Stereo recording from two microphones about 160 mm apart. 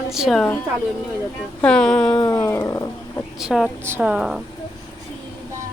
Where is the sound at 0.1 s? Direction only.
Centre (ahead or behind).